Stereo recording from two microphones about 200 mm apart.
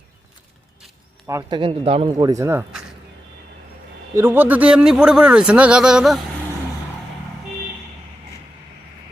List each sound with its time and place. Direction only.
1.3 s speech: 20° right (ahead or behind)
4.1 s speech: 10° right (ahead or behind)